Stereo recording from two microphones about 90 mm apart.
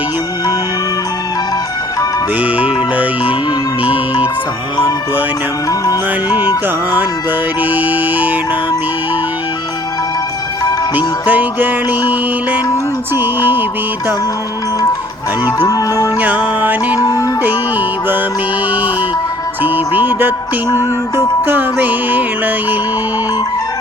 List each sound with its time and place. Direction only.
2.4 s music: 15° right (ahead or behind)
7.6 s music: 20° right (ahead or behind)
10.9 s music: 20° right (ahead or behind)
15.4 s music: 40° left (ahead or behind)
16.2 s music: 20° right (ahead or behind)
17.0 s music: 35° left (ahead or behind)
17.4 s music: 20° right (ahead or behind)
19.6 s music: 20° right (ahead or behind)
20.7 s music: 35° left (ahead or behind)
21.4 s music: 20° right (ahead or behind)